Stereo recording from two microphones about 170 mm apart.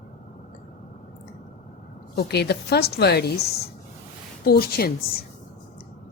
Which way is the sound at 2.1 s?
75° left (ahead or behind).